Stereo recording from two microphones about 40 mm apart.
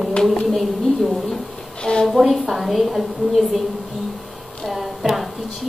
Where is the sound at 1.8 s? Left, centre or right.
Centre.